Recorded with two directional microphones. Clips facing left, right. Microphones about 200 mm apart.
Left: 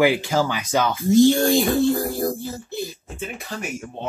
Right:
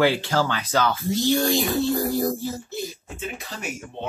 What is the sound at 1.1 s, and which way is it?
Speech, 50° left (ahead or behind).